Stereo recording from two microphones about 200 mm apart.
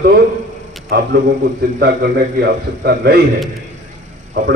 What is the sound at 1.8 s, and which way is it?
A man's voice, 55° right (ahead or behind).